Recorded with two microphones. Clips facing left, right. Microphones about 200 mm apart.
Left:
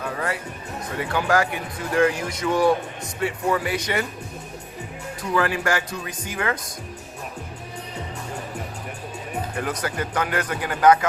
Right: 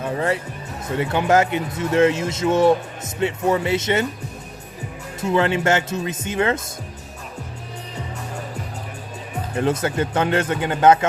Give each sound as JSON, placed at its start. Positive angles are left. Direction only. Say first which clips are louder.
{"t": 0.0, "sound": "speech", "louder": "right 5 dB", "side_deg": -25}
{"t": 5.2, "sound": "speech", "louder": "right 4 dB", "side_deg": -25}
{"t": 9.6, "sound": "speech", "louder": "right 8 dB", "side_deg": -25}